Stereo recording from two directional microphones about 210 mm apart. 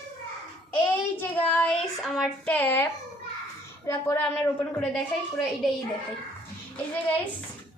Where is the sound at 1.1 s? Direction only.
10° left (ahead or behind).